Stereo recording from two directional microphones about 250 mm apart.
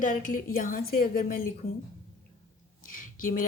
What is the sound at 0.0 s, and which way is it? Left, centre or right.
A woman's voice, left.